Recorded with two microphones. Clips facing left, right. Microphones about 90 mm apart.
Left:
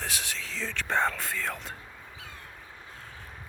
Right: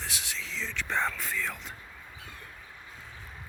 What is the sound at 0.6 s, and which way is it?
Speech, 45° left (ahead or behind).